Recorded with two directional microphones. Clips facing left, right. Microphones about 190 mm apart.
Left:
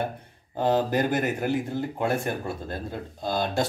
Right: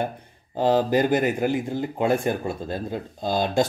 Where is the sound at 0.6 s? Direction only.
15° right (ahead or behind).